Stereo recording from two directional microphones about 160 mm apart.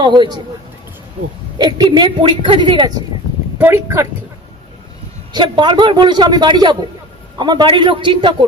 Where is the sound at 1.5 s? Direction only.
25° right (ahead or behind).